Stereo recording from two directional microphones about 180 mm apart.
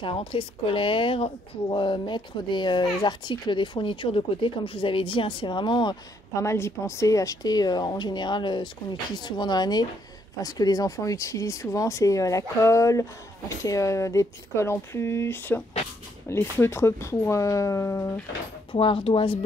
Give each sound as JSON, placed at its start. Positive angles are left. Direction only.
{"t": 0.0, "sound": "speech", "side_deg": 30}
{"t": 18.7, "sound": "speech", "side_deg": 30}